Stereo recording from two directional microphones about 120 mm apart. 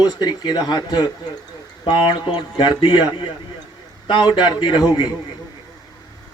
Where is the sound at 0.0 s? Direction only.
35° left (ahead or behind).